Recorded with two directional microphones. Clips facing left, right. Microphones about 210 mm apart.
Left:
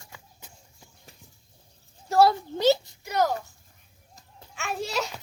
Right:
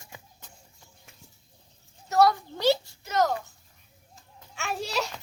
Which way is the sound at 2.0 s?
30° left (ahead or behind).